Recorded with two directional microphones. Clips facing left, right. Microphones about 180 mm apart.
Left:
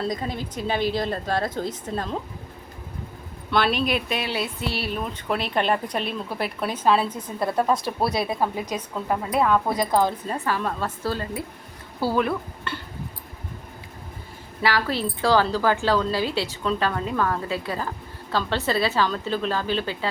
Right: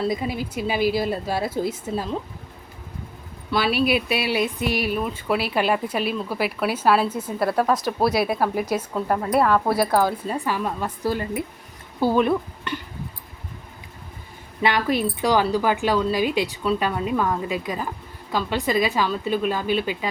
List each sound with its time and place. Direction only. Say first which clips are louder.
0.0 s speech: right 3 dB; 10° right (ahead or behind)
3.5 s speech: right 2 dB; 5° right (ahead or behind)
14.6 s speech: right 3 dB; 20° right (ahead or behind)